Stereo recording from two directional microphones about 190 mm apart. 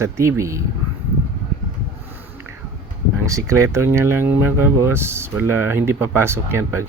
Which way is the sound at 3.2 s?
15° right (ahead or behind).